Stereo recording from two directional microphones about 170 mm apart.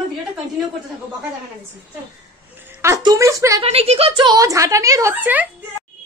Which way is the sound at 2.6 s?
15° right (ahead or behind).